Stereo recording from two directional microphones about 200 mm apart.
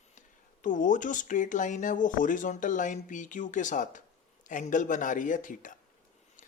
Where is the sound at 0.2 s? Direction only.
40° left (ahead or behind).